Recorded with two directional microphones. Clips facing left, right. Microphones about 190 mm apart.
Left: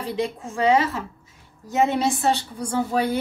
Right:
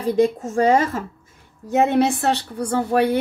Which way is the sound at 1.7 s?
60° right (ahead or behind).